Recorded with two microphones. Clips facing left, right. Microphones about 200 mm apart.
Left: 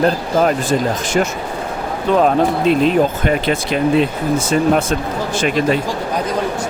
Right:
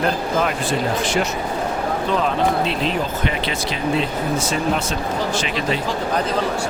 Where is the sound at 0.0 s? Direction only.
45° left (ahead or behind).